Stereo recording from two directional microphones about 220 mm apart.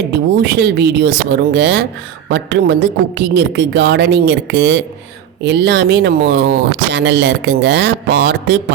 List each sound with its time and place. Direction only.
0.1 s speech: 50° right (ahead or behind)